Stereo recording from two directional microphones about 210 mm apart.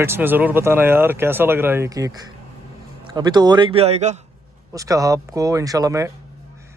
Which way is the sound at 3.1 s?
20° right (ahead or behind).